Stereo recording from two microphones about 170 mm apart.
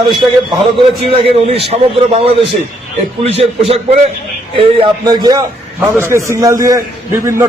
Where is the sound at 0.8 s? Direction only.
35° right (ahead or behind).